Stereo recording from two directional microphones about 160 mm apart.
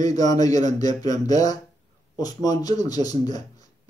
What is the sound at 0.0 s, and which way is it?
Speech, 20° left (ahead or behind).